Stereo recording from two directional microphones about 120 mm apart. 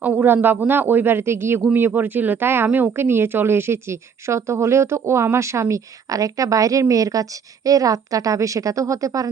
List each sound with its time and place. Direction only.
0.0 s speech: 15° right (ahead or behind); by 9.3 s 30° right (ahead or behind)